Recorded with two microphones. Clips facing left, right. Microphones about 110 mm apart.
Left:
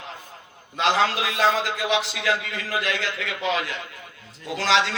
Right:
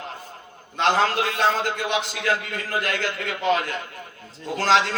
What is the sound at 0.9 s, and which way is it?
Speech, 45° right (ahead or behind).